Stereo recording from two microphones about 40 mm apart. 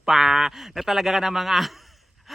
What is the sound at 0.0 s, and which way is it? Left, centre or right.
A man's voice, centre.